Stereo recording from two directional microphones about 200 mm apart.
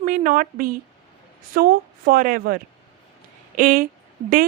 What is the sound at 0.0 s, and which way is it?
A woman's voice, 40° right (ahead or behind).